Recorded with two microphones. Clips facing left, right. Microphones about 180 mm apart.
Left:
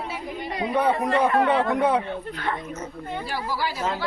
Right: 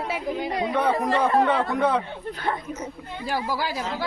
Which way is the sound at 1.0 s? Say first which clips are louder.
Even; 35° right (ahead or behind).